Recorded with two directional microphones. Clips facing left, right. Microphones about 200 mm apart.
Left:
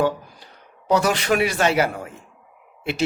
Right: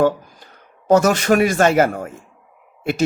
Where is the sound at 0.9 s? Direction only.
45° right (ahead or behind).